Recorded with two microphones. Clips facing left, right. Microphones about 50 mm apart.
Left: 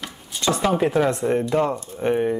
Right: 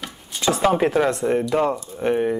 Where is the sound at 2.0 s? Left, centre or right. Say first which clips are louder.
Even; centre.